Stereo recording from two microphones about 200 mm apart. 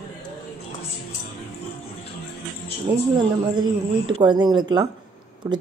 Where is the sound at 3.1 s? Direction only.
20° right (ahead or behind).